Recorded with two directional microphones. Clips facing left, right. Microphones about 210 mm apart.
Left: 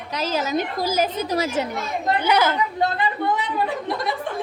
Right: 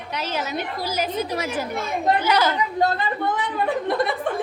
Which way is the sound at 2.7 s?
45° right (ahead or behind).